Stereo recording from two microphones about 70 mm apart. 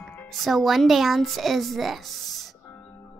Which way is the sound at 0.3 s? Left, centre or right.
Centre.